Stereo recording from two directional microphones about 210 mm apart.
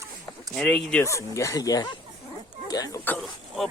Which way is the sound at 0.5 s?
5° left (ahead or behind).